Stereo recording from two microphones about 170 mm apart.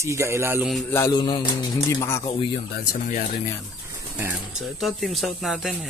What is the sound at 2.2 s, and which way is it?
Speech, 35° left (ahead or behind).